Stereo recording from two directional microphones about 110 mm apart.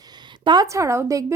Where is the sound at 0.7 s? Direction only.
25° right (ahead or behind).